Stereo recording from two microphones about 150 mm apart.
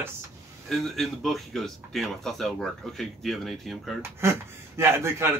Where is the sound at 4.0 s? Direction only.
15° right (ahead or behind).